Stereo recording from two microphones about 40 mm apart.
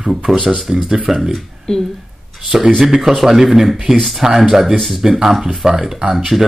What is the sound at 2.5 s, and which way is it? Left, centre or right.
Speech, centre.